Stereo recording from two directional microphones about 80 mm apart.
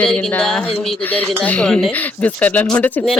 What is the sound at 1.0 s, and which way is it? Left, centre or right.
Speech, left.